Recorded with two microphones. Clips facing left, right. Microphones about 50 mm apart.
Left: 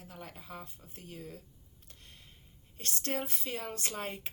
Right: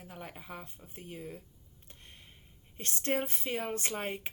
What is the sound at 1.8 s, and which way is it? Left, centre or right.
Computer keyboard, right.